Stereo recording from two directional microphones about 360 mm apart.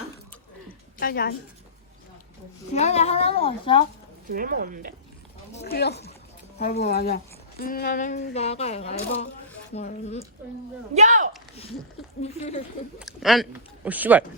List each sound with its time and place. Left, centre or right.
0.9 s a woman's voice: left
2.7 s speech: centre
4.3 s speech: right
5.6 s speech: left
10.9 s speech: centre
12.2 s speech: centre
13.0 s speech: centre